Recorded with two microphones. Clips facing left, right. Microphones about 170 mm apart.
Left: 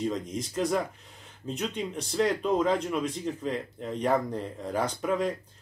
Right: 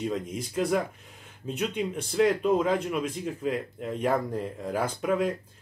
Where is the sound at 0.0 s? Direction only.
5° right (ahead or behind).